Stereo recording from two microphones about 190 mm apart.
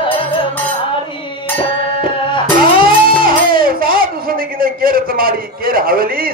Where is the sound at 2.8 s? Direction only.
50° right (ahead or behind).